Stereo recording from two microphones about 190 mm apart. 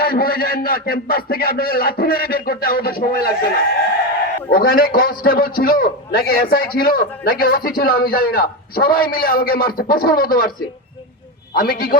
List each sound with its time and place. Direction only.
0.0 s a man's voice: 50° left (ahead or behind)
11.5 s a man's voice: 50° left (ahead or behind)